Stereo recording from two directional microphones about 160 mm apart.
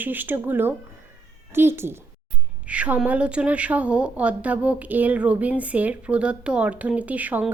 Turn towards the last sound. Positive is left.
turn(degrees=-10)  # may be behind; listen again after turning